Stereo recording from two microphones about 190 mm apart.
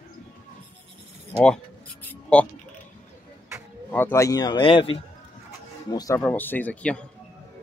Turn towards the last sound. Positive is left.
turn(degrees=5)  # may be behind; listen again after turning